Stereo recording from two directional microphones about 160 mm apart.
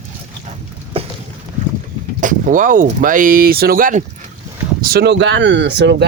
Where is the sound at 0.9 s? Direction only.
35° right (ahead or behind).